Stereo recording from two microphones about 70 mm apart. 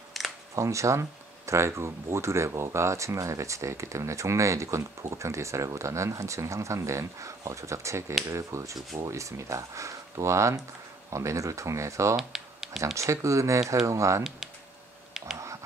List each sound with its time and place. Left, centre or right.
0.2 s camera: centre
0.6 s speech: right
12.2 s computer keyboard: centre
12.9 s speech: right
15.3 s a sound: right